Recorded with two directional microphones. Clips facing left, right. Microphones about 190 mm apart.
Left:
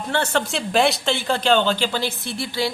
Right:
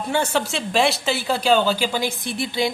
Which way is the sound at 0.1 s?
10° right (ahead or behind).